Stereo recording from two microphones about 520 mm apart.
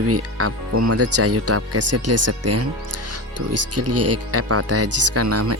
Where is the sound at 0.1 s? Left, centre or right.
Right.